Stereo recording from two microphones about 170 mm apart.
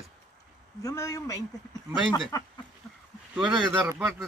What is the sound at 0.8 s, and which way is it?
Speech, 20° left (ahead or behind).